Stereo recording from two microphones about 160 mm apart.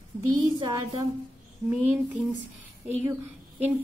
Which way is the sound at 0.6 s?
20° right (ahead or behind).